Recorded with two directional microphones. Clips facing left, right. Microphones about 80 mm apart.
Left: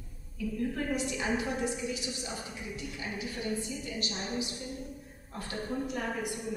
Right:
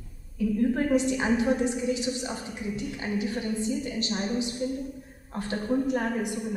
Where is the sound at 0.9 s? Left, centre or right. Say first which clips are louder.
Right 8 dB; right.